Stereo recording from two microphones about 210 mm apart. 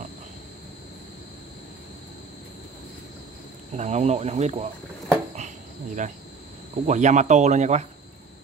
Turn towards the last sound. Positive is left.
turn(degrees=-35)  # may be behind; listen again after turning